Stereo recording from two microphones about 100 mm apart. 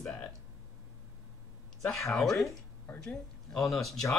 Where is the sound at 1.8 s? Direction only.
Centre (ahead or behind).